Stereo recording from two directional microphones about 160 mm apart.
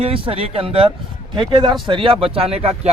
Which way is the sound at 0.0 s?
35° right (ahead or behind).